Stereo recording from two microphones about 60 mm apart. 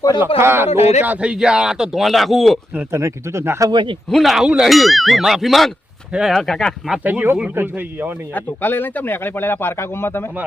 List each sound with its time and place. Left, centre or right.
0.2 s speech: right
1.1 s speech: centre
2.9 s speech: right
4.1 s speech: centre
6.4 s speech: centre
7.0 s speech: right
8.3 s speech: left